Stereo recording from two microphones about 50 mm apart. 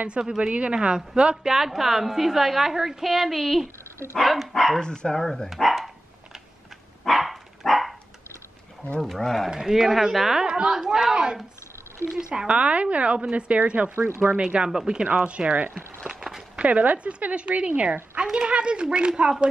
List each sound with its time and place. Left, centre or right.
0.4 s speech: right
1.3 s a woman's voice: centre
4.7 s speech: centre
7.1 s dog: centre
9.0 s speech: centre
9.5 s a woman's voice: centre; by 13.9 s right
13.9 s speech: right
14.4 s a woman's voice: centre
16.1 s a sound: centre
16.5 s speech: right